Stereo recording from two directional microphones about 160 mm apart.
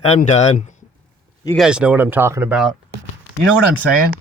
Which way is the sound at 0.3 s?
45° left (ahead or behind).